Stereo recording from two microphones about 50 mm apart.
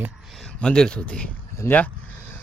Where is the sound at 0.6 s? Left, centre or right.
Centre.